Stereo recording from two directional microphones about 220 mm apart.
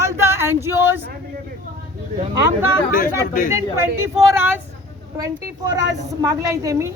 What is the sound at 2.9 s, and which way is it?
Speech, 35° left (ahead or behind).